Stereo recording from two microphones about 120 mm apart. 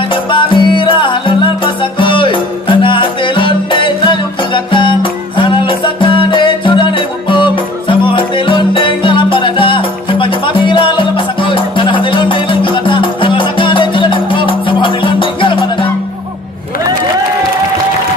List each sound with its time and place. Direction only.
0.1 s music: 45° left (ahead or behind)